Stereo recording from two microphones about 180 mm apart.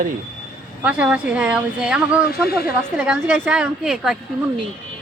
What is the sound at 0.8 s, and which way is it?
A woman's voice, 5° right (ahead or behind).